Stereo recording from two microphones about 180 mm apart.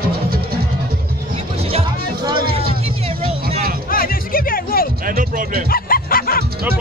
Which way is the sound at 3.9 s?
50° left (ahead or behind).